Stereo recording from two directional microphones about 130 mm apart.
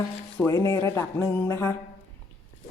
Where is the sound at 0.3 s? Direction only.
20° left (ahead or behind).